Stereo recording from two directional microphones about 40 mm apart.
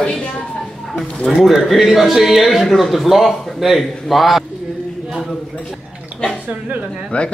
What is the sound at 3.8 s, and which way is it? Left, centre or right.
Speech, centre.